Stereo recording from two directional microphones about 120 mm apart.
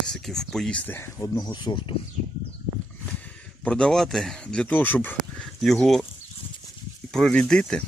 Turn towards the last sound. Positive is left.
turn(degrees=5)  # may be behind; listen again after turning